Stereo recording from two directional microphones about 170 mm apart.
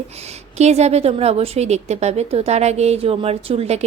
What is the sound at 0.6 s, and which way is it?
A woman's voice, 40° right (ahead or behind).